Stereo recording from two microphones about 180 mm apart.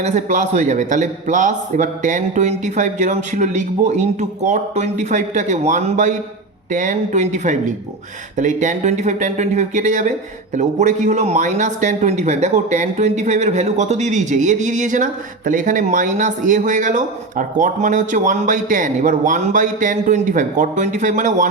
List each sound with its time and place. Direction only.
0.0 s a man's voice: 45° right (ahead or behind)